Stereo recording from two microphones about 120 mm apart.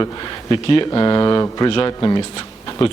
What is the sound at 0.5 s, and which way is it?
A man's voice, 40° left (ahead or behind).